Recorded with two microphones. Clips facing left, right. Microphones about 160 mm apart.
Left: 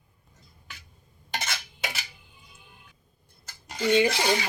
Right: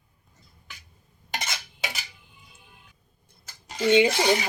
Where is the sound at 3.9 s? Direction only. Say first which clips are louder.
Right 3 dB; 20° right (ahead or behind).